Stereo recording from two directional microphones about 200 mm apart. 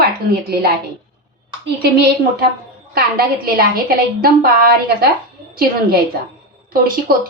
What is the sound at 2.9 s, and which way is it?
A woman's voice, 50° right (ahead or behind).